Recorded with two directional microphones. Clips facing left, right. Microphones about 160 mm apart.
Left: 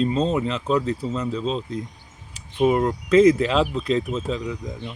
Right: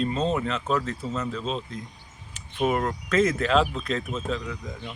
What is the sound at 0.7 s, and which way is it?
Speech, 35° left (ahead or behind).